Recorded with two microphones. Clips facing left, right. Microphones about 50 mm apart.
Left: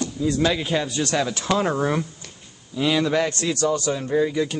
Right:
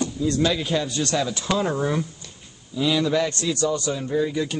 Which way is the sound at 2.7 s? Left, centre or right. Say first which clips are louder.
Left 1 dB; left.